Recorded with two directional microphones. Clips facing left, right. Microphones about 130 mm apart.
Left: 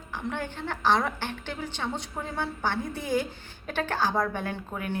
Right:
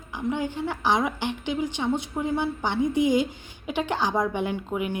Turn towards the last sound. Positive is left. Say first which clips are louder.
# right 5 dB
turn(degrees=-15)  # may be behind; listen again after turning